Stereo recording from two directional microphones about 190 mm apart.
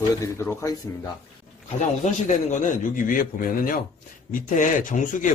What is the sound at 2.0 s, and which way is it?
A man's voice, 40° left (ahead or behind).